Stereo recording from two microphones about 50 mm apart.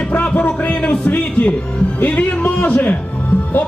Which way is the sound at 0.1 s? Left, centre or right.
Left.